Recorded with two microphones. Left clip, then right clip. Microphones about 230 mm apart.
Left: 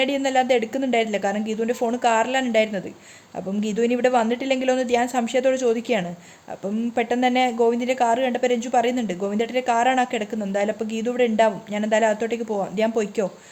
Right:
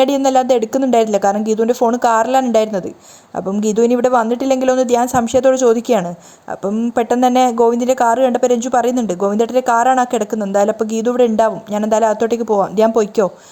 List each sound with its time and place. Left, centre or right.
0.0 s speech: right